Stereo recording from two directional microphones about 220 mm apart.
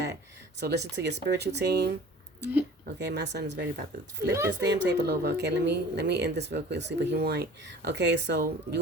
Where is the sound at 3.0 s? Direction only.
50° right (ahead or behind).